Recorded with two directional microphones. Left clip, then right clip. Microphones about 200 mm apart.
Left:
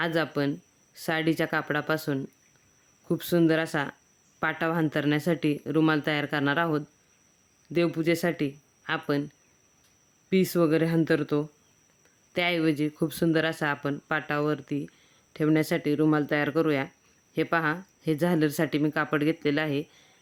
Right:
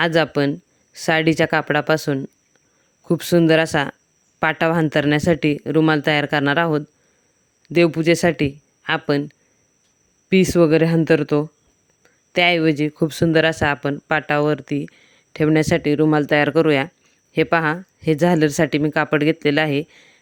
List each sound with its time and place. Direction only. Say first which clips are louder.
0.0 s speech: right 10 dB; 35° right (ahead or behind)
10.2 s speech: right 9 dB; 35° right (ahead or behind)